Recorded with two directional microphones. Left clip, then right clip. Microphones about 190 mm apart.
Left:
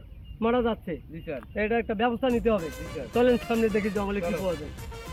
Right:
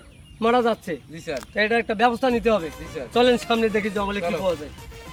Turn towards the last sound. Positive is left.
turn(degrees=0)  # may be behind; listen again after turning